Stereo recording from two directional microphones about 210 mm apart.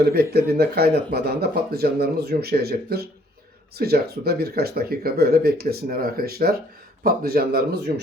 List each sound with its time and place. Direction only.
0.0 s speech: 50° right (ahead or behind)